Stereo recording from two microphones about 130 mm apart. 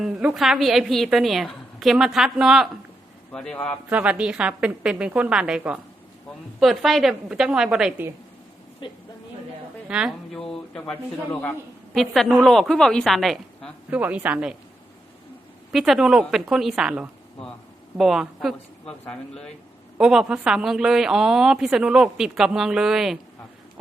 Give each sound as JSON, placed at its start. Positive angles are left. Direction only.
{"t": 0.0, "sound": "a woman's voice", "side_deg": -5}
{"t": 3.8, "sound": "a woman's voice", "side_deg": -10}
{"t": 8.8, "sound": "speech", "side_deg": 40}
{"t": 9.9, "sound": "a woman's voice", "side_deg": -5}
{"t": 13.9, "sound": "a woman's voice", "side_deg": -15}
{"t": 15.7, "sound": "a woman's voice", "side_deg": 0}